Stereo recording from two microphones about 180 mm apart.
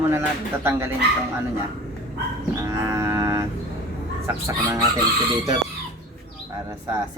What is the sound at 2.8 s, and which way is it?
Cattle, 15° right (ahead or behind).